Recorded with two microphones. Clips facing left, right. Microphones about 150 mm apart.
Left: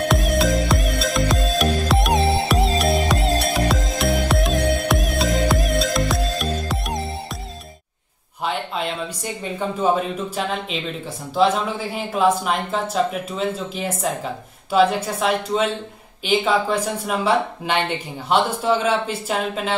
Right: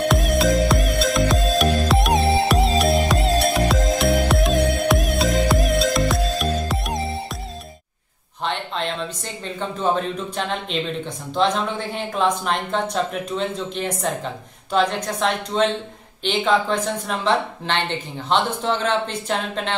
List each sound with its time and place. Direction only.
0.1 s music: centre (ahead or behind)
8.5 s a sound: 5° left (ahead or behind)
9.8 s speech: 5° left (ahead or behind)